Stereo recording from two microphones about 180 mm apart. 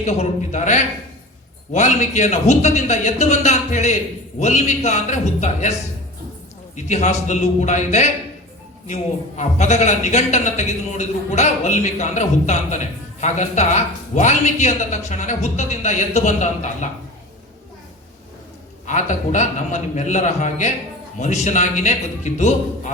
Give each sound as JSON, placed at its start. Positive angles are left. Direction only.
{"t": 0.0, "sound": "speech", "side_deg": 40}
{"t": 6.7, "sound": "speech", "side_deg": 40}
{"t": 18.9, "sound": "speech", "side_deg": 40}